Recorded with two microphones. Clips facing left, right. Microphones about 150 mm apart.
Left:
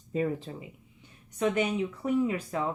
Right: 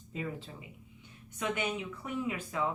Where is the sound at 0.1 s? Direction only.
40° left (ahead or behind).